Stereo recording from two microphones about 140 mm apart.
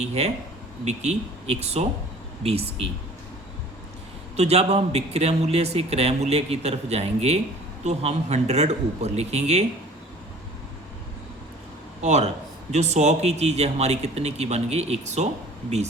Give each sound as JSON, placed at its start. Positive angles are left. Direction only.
{"t": 0.0, "sound": "a man's voice", "side_deg": -50}
{"t": 4.4, "sound": "a man's voice", "side_deg": -50}
{"t": 12.0, "sound": "a man's voice", "side_deg": -50}